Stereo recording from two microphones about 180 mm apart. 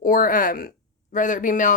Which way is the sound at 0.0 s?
50° left (ahead or behind).